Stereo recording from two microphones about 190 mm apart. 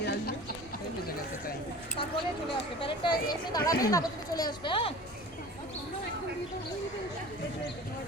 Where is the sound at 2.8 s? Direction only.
25° left (ahead or behind).